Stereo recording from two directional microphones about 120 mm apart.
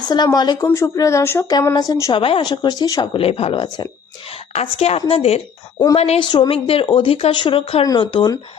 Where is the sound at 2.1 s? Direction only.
45° left (ahead or behind).